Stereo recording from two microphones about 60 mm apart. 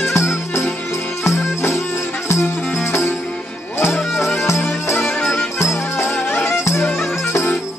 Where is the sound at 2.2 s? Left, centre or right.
Left.